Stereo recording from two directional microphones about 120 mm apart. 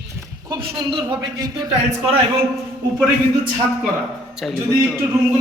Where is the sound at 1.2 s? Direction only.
35° right (ahead or behind).